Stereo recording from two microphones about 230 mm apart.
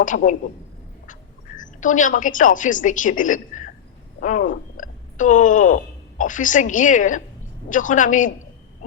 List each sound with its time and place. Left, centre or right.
0.0 s a woman's voice: left
1.5 s a woman's voice: left